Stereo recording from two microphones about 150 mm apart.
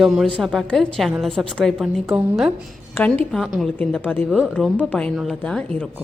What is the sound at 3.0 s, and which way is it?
Speech, 15° left (ahead or behind).